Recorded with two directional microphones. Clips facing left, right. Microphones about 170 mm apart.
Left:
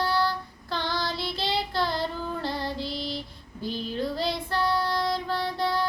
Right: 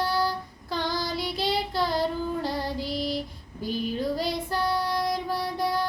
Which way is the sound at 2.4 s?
10° right (ahead or behind).